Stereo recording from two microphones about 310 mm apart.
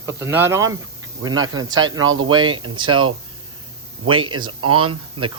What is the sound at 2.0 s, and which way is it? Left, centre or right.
Speech, right.